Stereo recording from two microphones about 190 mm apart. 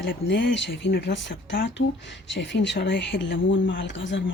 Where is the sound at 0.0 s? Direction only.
70° left (ahead or behind).